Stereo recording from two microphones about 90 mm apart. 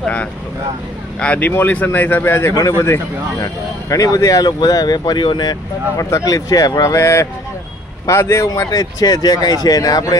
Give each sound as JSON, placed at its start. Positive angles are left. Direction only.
{"t": 0.0, "sound": "vehicle", "side_deg": 15}
{"t": 1.2, "sound": "a man's voice", "side_deg": 15}
{"t": 6.0, "sound": "speech", "side_deg": 35}
{"t": 8.5, "sound": "speech", "side_deg": 45}